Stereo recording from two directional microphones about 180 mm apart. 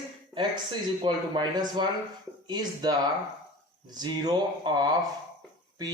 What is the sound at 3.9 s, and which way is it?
Speech, 20° right (ahead or behind).